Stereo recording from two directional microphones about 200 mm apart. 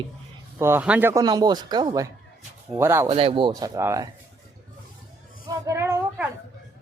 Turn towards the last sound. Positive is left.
turn(degrees=-10)  # may be behind; listen again after turning